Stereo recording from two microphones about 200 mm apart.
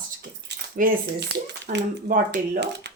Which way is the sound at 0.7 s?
50° right (ahead or behind).